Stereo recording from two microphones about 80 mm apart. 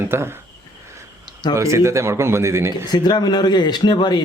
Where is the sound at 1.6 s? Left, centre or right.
Right.